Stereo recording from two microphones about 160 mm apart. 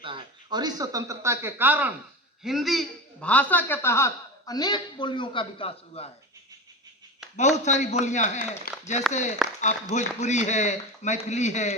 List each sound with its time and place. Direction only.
0.0 s speech: 30° right (ahead or behind); by 1.9 s 10° right (ahead or behind)
2.4 s a man's voice: centre (ahead or behind); by 6.1 s 35° left (ahead or behind)
7.3 s a man's voice: 45° left (ahead or behind)